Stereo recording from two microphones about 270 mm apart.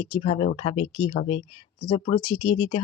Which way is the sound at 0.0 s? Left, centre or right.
Left.